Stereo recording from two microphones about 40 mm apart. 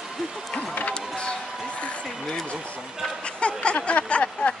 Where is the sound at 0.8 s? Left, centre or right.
Left.